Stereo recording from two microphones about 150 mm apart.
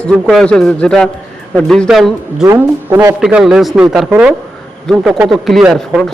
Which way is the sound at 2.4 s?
15° right (ahead or behind).